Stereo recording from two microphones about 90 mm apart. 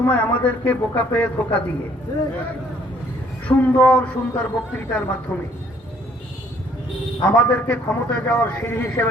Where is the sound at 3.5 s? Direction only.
15° left (ahead or behind).